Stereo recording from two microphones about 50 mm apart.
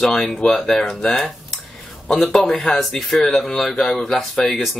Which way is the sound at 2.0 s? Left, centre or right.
Centre.